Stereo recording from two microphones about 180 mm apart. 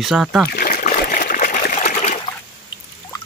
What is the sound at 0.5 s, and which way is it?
Water, 55° left (ahead or behind).